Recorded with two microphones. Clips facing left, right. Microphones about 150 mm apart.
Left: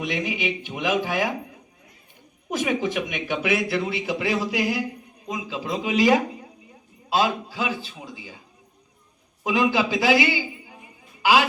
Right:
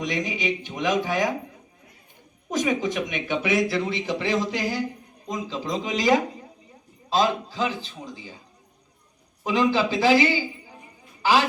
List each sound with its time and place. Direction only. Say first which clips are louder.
0.0 s speech: even; 10° left (ahead or behind)
2.5 s speech: even; 10° left (ahead or behind)
9.4 s a man's voice: even; 15° left (ahead or behind)